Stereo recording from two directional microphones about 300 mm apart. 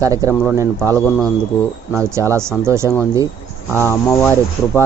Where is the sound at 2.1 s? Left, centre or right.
Centre.